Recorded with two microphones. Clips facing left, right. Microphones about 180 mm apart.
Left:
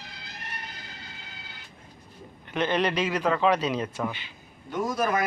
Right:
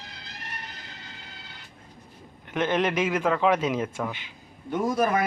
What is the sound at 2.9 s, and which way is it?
A man's voice, 10° right (ahead or behind).